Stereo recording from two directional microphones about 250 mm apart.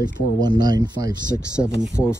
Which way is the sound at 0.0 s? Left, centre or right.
Centre.